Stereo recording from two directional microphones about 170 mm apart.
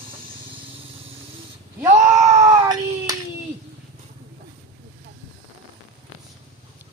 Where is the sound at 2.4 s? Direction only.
20° right (ahead or behind).